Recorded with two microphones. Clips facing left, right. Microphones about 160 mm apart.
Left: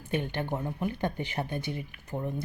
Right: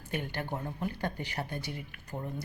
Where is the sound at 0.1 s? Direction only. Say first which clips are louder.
Left 5 dB; 20° left (ahead or behind).